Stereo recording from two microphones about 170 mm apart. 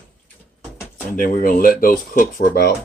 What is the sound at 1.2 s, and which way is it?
Speech, 55° left (ahead or behind).